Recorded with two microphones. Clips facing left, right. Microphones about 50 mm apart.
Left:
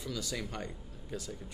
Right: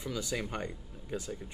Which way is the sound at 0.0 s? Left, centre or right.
Right.